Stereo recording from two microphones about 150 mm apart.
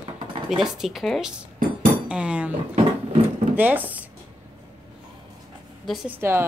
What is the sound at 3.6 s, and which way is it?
Speech, 10° right (ahead or behind).